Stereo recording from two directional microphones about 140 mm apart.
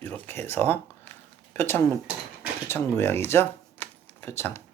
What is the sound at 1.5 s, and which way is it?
Speech, 15° left (ahead or behind).